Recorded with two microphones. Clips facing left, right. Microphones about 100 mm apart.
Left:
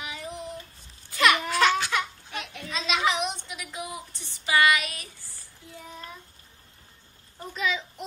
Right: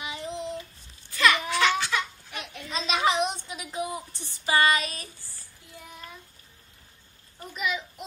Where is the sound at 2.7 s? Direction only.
30° right (ahead or behind).